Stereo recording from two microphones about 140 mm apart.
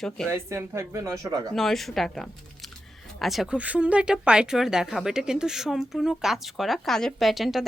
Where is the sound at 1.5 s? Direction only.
Centre (ahead or behind).